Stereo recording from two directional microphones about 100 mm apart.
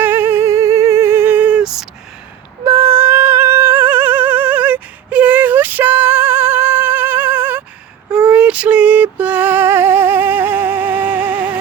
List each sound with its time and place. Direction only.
0.0 s music: 20° right (ahead or behind); by 1.9 s 5° right (ahead or behind)
2.6 s humming: 20° right (ahead or behind)
8.1 s female singing: 10° right (ahead or behind)